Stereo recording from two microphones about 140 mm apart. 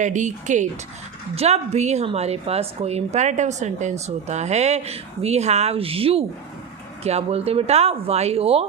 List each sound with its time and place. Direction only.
0.0 s speech: 60° right (ahead or behind)
1.4 s a woman's voice: 50° right (ahead or behind)